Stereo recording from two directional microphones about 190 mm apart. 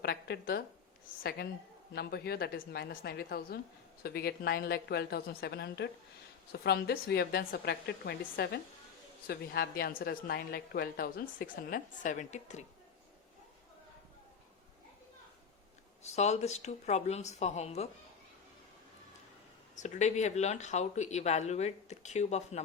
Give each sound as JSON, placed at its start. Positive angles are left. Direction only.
{"t": 0.0, "sound": "a woman's voice", "side_deg": 55}
{"t": 16.1, "sound": "speech", "side_deg": 35}
{"t": 19.7, "sound": "speech", "side_deg": 40}